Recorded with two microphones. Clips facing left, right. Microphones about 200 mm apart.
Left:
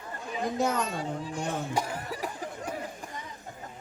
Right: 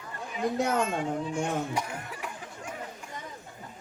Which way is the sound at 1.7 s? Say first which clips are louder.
Left 3 dB; 35° left (ahead or behind).